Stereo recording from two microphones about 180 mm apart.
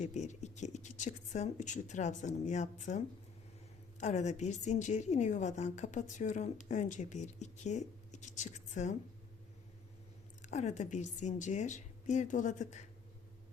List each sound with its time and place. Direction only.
0.0 s a woman's voice: 40° left (ahead or behind)
4.0 s a woman's voice: 40° left (ahead or behind)
10.4 s a woman's voice: 40° left (ahead or behind)